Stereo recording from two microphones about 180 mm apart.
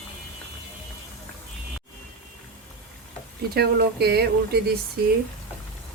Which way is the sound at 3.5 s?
60° right (ahead or behind).